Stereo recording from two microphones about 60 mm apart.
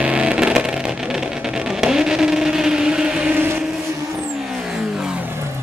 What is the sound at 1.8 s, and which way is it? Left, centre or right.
Vehicle, centre.